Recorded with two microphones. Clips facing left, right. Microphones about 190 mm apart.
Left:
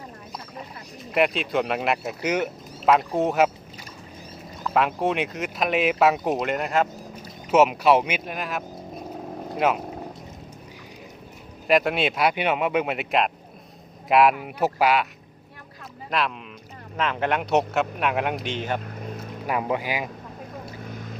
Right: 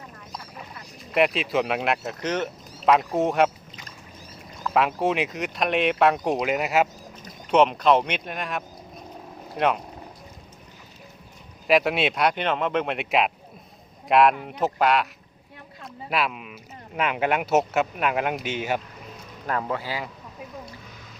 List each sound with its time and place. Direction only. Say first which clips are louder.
1.1 s speech: even; centre (ahead or behind)
4.6 s speech: even; centre (ahead or behind)
7.2 s speech: left 1 dB; 5° left (ahead or behind)
11.7 s speech: even; centre (ahead or behind)
16.0 s speech: even; 5° right (ahead or behind)
19.5 s speech: left 2 dB; 15° left (ahead or behind)